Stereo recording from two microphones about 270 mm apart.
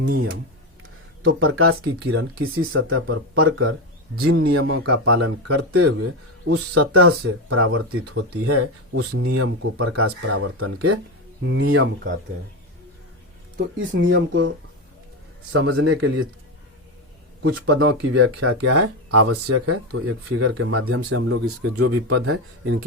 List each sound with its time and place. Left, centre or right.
1.2 s speech: right
13.7 s speech: right
15.5 s speech: right
17.4 s speech: right